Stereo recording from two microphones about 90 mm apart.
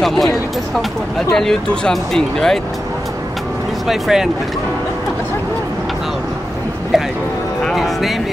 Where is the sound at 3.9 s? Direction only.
5° right (ahead or behind).